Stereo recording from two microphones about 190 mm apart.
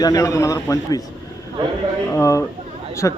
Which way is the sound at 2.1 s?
15° left (ahead or behind).